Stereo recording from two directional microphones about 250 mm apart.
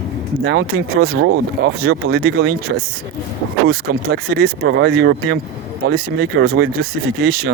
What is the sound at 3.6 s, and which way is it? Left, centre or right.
Speech, right.